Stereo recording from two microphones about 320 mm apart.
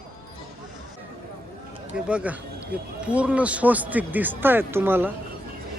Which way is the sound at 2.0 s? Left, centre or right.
Centre.